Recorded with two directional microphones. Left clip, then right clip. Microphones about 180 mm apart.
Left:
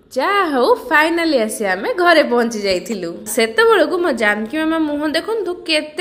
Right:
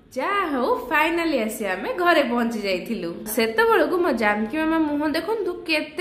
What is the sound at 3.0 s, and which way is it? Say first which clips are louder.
A woman's voice: left 6 dB; 15° left (ahead or behind).